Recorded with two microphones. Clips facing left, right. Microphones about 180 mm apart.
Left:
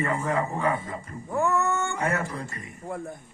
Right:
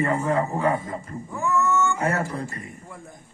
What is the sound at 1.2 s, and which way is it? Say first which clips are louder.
Cat: even; 60° left (ahead or behind).